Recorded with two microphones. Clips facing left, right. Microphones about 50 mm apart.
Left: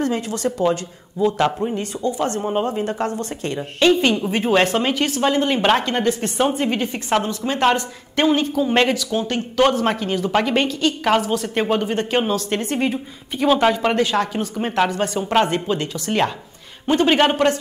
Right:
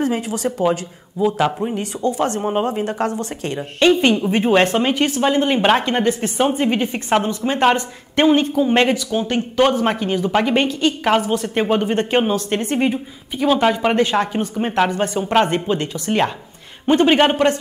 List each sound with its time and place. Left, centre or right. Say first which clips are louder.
0.0 s a woman's voice: right 1 dB; centre
11.9 s speech: right 3 dB; right
12.2 s a woman's voice: right 2 dB; centre
13.4 s speech: even; centre
13.9 s a woman's voice: right 2 dB; right
15.7 s speech: right 2 dB; right
16.1 s speech: right 2 dB; centre
16.8 s a woman's voice: right 2 dB; centre